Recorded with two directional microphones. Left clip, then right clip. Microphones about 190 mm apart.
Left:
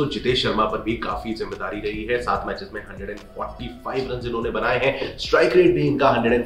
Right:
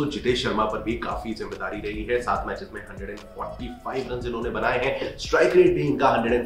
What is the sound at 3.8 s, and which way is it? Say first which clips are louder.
Speech: left 3 dB; 10° left (ahead or behind).